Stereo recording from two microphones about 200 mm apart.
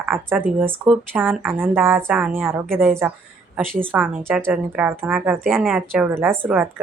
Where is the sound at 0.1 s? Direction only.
10° right (ahead or behind).